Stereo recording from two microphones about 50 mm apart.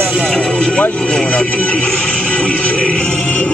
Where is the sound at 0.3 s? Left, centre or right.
Centre.